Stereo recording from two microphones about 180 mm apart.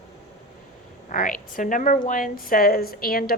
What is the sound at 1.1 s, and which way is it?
A woman's voice, 50° left (ahead or behind).